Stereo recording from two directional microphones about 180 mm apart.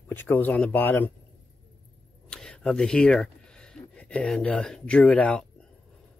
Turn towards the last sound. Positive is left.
turn(degrees=5)  # may be behind; listen again after turning